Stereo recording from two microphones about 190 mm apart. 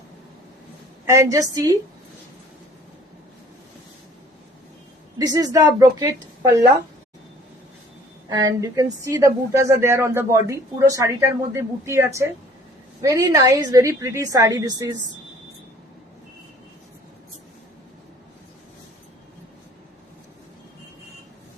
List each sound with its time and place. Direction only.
1.0 s speech: 15° right (ahead or behind)
5.1 s a woman's voice: 20° right (ahead or behind)
8.3 s speech: 20° right (ahead or behind)